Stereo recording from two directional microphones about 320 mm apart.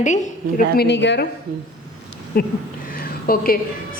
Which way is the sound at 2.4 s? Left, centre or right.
Left.